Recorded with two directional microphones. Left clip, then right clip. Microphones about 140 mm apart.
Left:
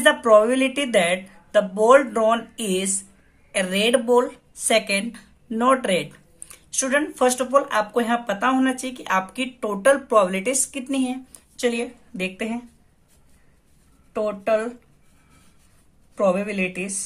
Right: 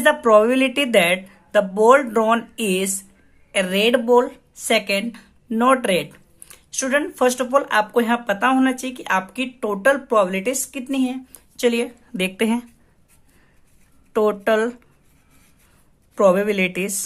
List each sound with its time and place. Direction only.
0.0 s speech: 25° right (ahead or behind); by 12.6 s 55° right (ahead or behind)
14.1 s speech: 50° right (ahead or behind)
16.2 s speech: 50° right (ahead or behind)